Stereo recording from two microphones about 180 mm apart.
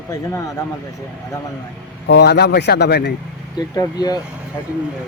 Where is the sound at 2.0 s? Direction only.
70° left (ahead or behind).